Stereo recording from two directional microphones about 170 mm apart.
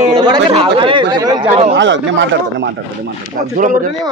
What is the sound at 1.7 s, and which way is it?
Speech, 90° right.